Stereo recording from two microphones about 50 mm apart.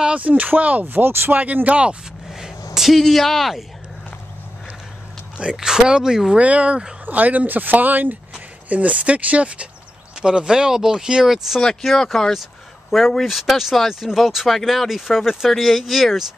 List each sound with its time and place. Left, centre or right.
0.0 s a sound: right
0.3 s speech: right
1.3 s speech: right
2.3 s a sound: centre
5.4 s speech: centre
6.3 s speech: right
7.1 s speech: right; by 16.3 s centre